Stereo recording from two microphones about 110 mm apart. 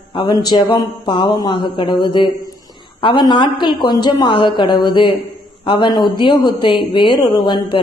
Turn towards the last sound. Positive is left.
turn(degrees=45)  # may be behind; listen again after turning